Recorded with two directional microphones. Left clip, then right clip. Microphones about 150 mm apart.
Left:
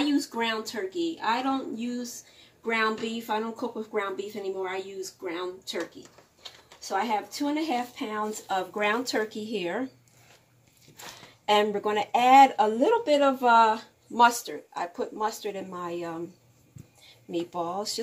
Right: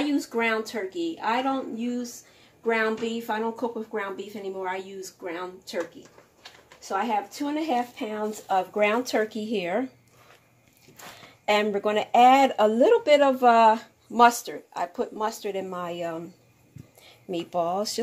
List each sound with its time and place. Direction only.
0.0 s speech: 20° right (ahead or behind)
8.4 s speech: 30° right (ahead or behind); by 9.8 s 45° right (ahead or behind)
11.4 s speech: 50° right (ahead or behind)